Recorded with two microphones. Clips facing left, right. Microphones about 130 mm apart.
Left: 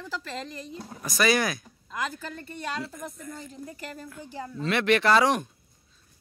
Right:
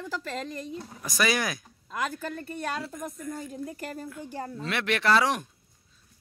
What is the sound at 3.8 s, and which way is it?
Speech, 45° right (ahead or behind).